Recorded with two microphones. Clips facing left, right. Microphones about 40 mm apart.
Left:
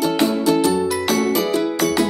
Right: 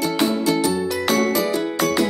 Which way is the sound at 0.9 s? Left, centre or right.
Centre.